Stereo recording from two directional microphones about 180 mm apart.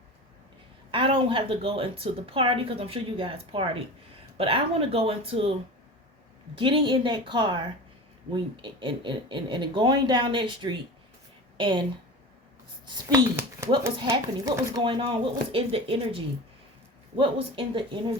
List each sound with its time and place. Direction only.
0.9 s a woman's voice: 30° right (ahead or behind)
6.6 s a child's voice: 30° right (ahead or behind)